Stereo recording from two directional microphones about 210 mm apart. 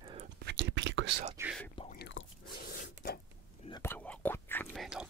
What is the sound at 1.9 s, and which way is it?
Chewing, 55° left (ahead or behind).